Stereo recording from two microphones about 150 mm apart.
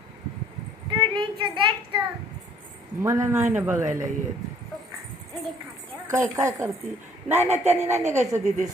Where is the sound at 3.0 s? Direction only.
20° right (ahead or behind).